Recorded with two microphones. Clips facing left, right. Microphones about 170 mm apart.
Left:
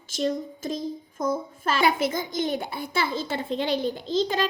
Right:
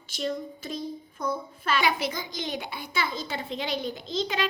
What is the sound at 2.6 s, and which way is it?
Speech, 30° left (ahead or behind).